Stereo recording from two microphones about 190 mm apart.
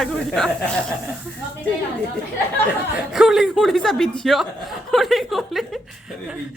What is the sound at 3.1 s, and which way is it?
Speech, centre (ahead or behind).